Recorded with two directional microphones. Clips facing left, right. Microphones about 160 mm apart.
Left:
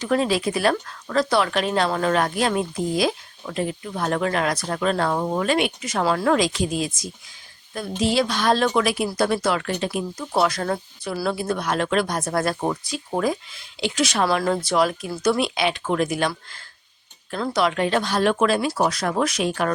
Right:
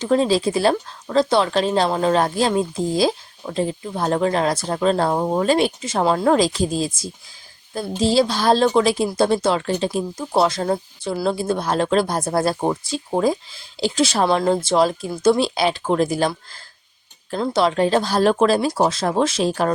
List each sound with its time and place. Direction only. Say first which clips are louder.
0.0 s a woman's voice: right 4 dB; 30° right (ahead or behind)
17.3 s a woman's voice: right 3 dB; 30° right (ahead or behind)